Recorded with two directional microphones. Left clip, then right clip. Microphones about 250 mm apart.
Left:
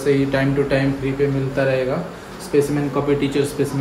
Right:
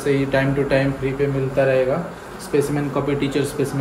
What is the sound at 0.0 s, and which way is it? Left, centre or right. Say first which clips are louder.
Speech: left 1 dB; centre.